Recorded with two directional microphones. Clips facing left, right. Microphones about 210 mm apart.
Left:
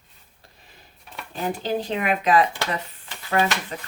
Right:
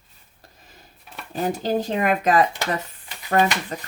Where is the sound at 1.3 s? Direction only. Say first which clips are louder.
Right 3 dB; 45° right (ahead or behind).